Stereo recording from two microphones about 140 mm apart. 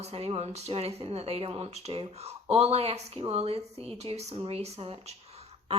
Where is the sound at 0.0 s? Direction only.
45° right (ahead or behind).